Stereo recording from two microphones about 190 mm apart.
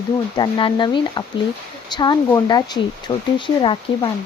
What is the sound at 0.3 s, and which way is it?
Speech, 25° left (ahead or behind).